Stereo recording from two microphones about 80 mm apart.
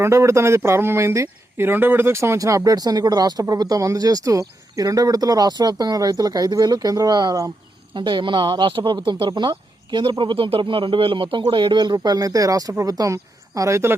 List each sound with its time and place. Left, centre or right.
0.0 s speech: right
7.9 s speech: right